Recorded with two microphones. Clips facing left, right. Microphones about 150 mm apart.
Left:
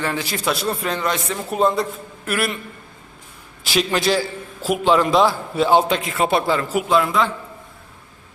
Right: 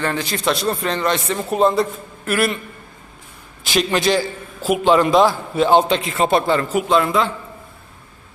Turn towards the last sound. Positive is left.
turn(degrees=0)  # may be behind; listen again after turning